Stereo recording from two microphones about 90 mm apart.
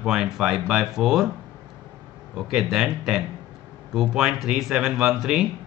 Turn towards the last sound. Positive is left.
turn(degrees=-5)  # may be behind; listen again after turning